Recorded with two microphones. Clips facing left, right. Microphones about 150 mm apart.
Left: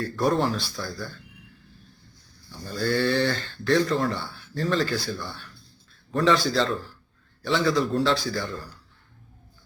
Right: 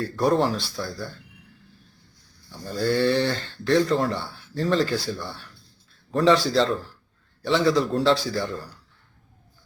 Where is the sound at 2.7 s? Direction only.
25° right (ahead or behind).